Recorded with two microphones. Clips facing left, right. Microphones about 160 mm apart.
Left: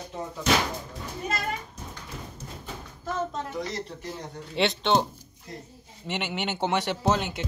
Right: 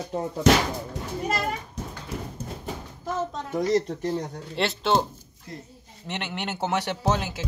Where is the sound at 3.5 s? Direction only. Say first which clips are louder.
Right 10 dB; 50° right (ahead or behind).